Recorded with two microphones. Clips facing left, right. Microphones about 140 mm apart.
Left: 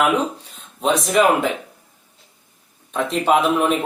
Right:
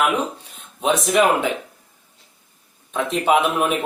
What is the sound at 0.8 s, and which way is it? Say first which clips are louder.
Speech: left 1 dB; centre (ahead or behind).